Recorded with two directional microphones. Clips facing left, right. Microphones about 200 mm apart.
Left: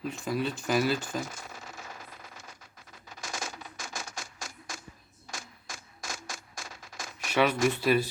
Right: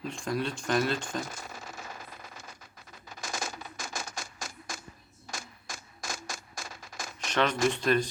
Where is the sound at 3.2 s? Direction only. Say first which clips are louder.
Right 2 dB; 40° right (ahead or behind).